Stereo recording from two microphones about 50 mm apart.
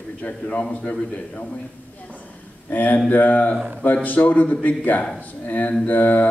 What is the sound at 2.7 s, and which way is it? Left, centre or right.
A man's voice, left.